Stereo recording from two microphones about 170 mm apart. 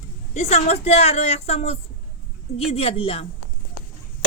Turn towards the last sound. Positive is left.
turn(degrees=35)  # may be behind; listen again after turning